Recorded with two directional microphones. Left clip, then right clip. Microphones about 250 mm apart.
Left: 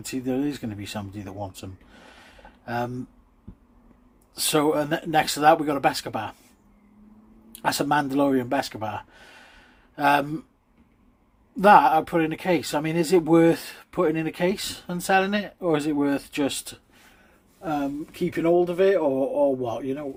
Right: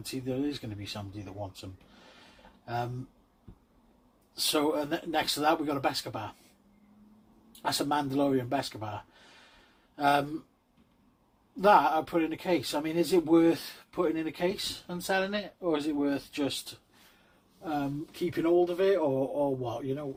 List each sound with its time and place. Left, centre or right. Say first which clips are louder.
0.0 s speech: left 6 dB; left
4.4 s speech: left 6 dB; left
7.6 s speech: left 7 dB; left
11.6 s speech: left 7 dB; left